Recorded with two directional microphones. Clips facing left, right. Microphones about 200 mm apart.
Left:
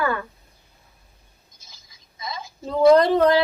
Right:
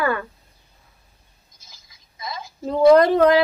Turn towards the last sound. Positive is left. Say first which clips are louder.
# right 2 dB
turn(degrees=-5)  # may be behind; listen again after turning